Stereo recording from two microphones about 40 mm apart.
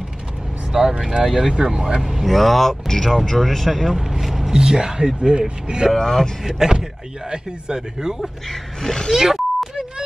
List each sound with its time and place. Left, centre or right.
0.9 s speech: centre
1.2 s speech: centre
1.5 s speech: centre
3.9 s speech: centre
5.9 s speech: centre
6.4 s speech: centre
8.2 s speech: centre
9.1 s beep: centre